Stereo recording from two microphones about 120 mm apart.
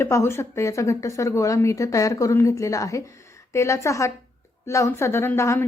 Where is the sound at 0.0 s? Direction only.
20° left (ahead or behind).